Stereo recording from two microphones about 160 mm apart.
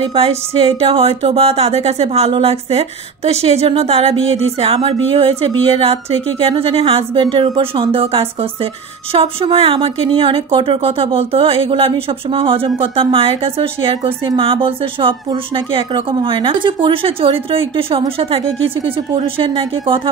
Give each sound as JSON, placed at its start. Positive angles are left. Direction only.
{"t": 0.1, "sound": "speech", "side_deg": -35}